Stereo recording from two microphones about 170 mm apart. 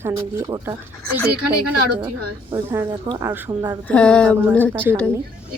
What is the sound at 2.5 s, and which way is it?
A woman's voice, 15° right (ahead or behind).